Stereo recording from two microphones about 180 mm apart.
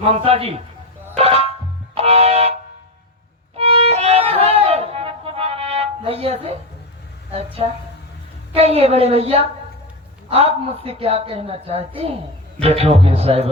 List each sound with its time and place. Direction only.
0.0 s speech: 30° right (ahead or behind)
1.1 s music: 35° right (ahead or behind)
3.6 s music: 30° right (ahead or behind)
7.3 s a woman's voice: 35° right (ahead or behind)